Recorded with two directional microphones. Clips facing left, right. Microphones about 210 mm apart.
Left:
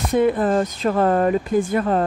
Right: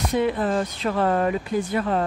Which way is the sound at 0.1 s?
50° left (ahead or behind).